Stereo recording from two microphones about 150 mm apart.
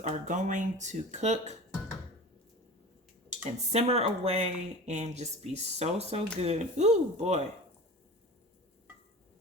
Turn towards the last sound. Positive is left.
turn(degrees=-45)  # may be behind; listen again after turning